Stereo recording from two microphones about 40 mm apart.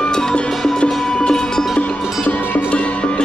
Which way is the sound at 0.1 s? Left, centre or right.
Centre.